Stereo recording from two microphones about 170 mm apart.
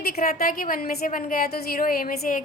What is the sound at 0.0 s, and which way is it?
A woman's voice, 60° left (ahead or behind).